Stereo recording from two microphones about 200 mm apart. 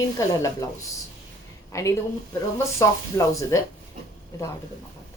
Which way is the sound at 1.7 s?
15° left (ahead or behind).